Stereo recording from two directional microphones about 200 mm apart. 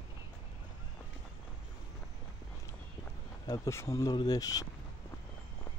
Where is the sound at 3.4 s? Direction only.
15° left (ahead or behind).